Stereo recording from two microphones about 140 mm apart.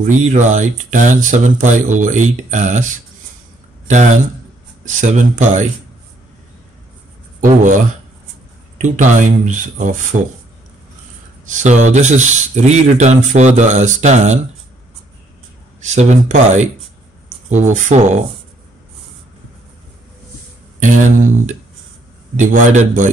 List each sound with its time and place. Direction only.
0.2 s speech: 60° right (ahead or behind)
7.3 s speech: 65° right (ahead or behind)
8.8 s speech: 60° right (ahead or behind)
11.4 s speech: 60° right (ahead or behind)
15.8 s speech: 55° right (ahead or behind)
20.8 s speech: 65° right (ahead or behind)